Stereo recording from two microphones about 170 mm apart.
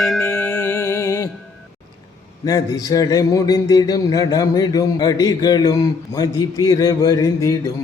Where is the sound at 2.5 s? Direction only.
20° left (ahead or behind).